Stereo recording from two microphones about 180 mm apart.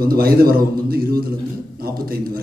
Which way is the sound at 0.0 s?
55° right (ahead or behind).